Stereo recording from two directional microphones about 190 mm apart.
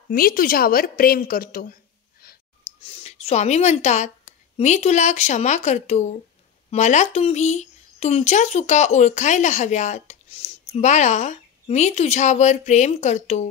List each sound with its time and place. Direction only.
0.1 s a woman's voice: 50° left (ahead or behind)
3.0 s speech: 35° left (ahead or behind)